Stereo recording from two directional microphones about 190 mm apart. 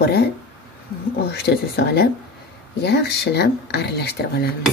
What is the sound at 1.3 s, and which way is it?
Speech, 60° left (ahead or behind).